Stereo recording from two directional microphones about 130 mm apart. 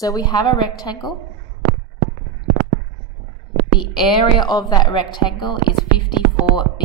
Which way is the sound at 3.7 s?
35° left (ahead or behind).